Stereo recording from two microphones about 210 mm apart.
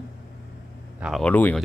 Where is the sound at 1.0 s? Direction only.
Centre (ahead or behind).